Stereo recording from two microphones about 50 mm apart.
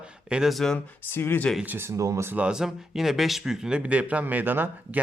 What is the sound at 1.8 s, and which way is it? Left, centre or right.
Speech, right.